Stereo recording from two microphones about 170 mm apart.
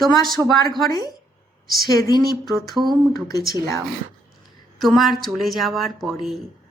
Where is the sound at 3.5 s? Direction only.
20° left (ahead or behind).